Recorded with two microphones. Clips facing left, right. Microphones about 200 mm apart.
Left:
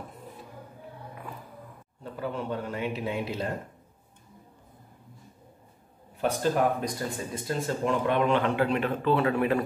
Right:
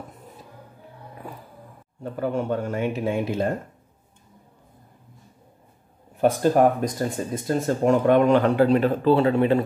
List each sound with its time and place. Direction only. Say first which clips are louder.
2.1 s speech: right 7 dB; 50° right (ahead or behind)
6.2 s speech: right 7 dB; 50° right (ahead or behind); by 9.6 s 25° right (ahead or behind)